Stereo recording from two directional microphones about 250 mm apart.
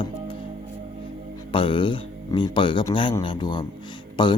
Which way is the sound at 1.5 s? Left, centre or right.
Centre.